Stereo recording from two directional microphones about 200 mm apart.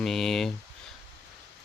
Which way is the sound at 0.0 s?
Centre (ahead or behind).